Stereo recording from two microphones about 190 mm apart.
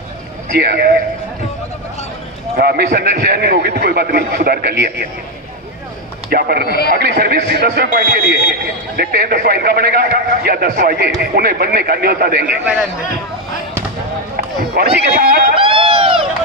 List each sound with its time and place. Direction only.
0.5 s a man's voice: 55° right (ahead or behind)
2.6 s a man's voice: 55° right (ahead or behind)
6.3 s a man's voice: 55° right (ahead or behind)
6.7 s a man's voice: 55° left (ahead or behind)
6.9 s a man's voice: 55° right (ahead or behind)
12.6 s a man's voice: 5° right (ahead or behind)
14.3 s speech: 55° right (ahead or behind)
15.5 s a sound: 30° right (ahead or behind)